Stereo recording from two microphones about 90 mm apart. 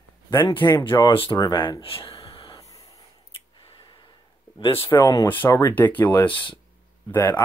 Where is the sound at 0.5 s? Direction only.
60° left (ahead or behind).